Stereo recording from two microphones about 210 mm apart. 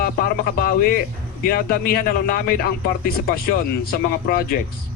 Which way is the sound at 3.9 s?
45° left (ahead or behind).